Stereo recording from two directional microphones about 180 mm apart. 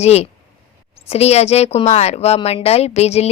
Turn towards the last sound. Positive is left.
turn(degrees=35)  # may be behind; listen again after turning